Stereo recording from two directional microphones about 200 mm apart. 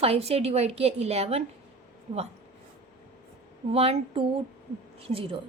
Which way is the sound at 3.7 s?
30° right (ahead or behind).